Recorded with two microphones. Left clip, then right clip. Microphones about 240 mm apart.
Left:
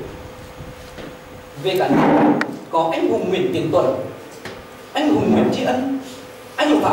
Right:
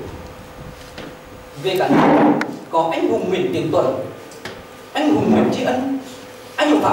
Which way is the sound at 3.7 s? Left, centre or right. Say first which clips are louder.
Left 1 dB; right.